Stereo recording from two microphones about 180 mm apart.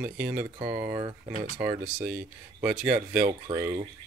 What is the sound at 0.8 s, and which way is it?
Speech, 25° right (ahead or behind).